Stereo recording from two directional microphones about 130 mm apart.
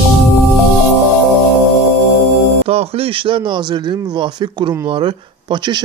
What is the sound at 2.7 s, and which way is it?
Speech, 50° right (ahead or behind).